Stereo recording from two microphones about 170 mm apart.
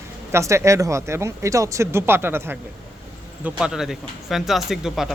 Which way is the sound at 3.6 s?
5° right (ahead or behind).